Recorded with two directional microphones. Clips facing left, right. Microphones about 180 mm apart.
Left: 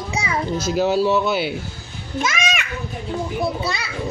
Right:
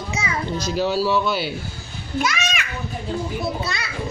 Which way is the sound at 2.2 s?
20° left (ahead or behind).